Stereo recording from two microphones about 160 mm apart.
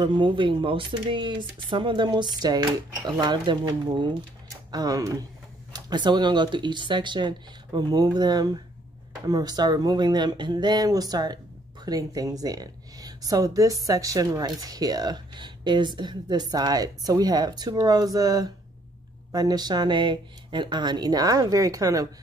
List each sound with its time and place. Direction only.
0.0 s speech: 30° right (ahead or behind)